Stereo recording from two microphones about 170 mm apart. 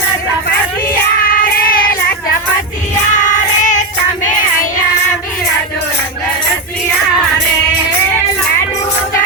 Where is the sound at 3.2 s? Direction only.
45° left (ahead or behind).